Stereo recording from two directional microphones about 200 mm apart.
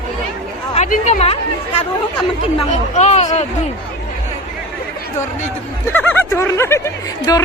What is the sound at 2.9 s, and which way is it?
Speech, 35° left (ahead or behind).